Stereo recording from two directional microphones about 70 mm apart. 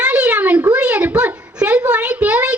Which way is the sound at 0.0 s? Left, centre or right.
Centre.